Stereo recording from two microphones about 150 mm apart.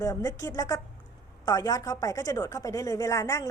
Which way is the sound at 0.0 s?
20° left (ahead or behind).